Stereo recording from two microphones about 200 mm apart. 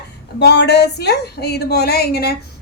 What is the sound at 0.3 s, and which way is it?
A woman's voice, 60° left (ahead or behind).